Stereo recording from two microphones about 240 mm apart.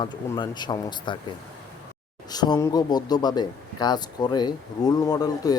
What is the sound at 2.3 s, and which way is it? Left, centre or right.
Speech, centre.